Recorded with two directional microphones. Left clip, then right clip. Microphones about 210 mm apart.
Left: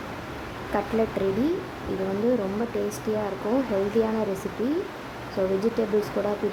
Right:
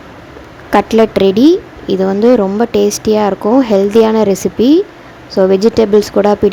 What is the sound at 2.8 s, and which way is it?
Speech, 40° right (ahead or behind).